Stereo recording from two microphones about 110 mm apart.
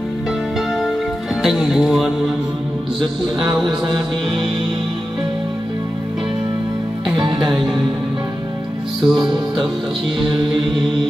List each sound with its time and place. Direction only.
0.7 s music: centre (ahead or behind)
7.2 s music: 45° right (ahead or behind)
9.0 s music: 5° right (ahead or behind)